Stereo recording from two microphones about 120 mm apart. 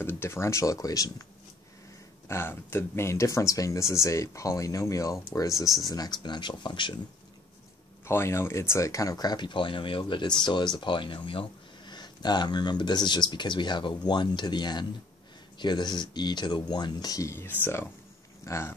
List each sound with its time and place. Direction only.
0.0 s speech: 20° left (ahead or behind)
2.2 s speech: 20° left (ahead or behind); by 7.0 s 40° left (ahead or behind)
8.0 s speech: 20° left (ahead or behind)